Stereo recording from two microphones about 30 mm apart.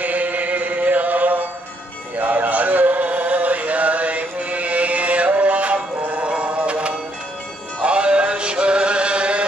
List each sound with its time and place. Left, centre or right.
0.0 s music: right
2.1 s music: right